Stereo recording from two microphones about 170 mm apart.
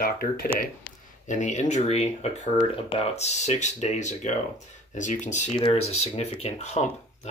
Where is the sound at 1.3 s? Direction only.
45° left (ahead or behind).